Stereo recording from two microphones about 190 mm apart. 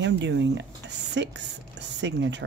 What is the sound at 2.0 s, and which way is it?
Speech, 65° right (ahead or behind).